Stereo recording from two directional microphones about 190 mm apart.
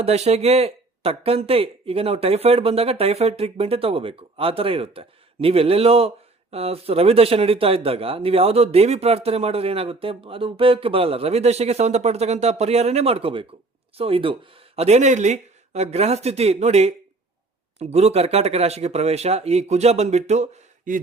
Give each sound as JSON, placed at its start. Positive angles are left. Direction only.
{"t": 0.0, "sound": "speech", "side_deg": -35}